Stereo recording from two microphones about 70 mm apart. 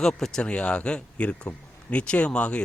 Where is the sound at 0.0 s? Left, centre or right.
Centre.